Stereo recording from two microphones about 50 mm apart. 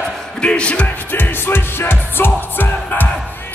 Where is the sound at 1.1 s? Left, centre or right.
Left.